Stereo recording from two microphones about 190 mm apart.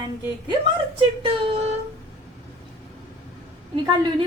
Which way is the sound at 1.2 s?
30° right (ahead or behind).